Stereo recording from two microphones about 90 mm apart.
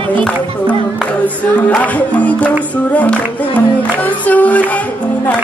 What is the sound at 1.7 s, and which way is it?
Music, 15° left (ahead or behind).